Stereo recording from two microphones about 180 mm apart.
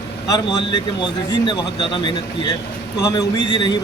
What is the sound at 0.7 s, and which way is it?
Speech, 25° left (ahead or behind).